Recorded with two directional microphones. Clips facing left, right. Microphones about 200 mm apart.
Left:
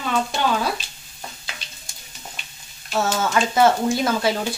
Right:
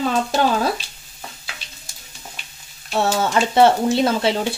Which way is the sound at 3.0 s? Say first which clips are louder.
Right 2 dB; 30° right (ahead or behind).